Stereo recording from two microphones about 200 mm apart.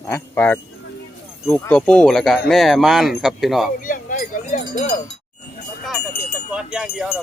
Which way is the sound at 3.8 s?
45° left (ahead or behind).